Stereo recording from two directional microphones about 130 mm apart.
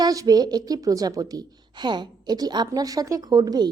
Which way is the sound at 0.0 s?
30° right (ahead or behind).